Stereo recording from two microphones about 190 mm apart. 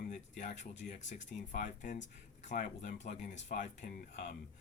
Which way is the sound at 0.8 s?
50° left (ahead or behind).